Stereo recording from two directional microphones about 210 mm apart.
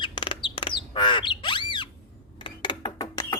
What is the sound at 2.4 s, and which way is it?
Mechanisms, 20° left (ahead or behind).